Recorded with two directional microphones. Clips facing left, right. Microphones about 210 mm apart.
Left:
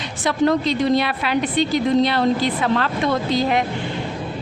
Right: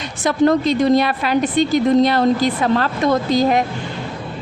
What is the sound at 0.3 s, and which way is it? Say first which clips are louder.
A woman's voice: right 3 dB; 45° right (ahead or behind).